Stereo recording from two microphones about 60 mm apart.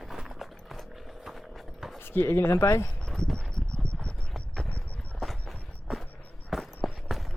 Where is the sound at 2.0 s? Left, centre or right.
Left.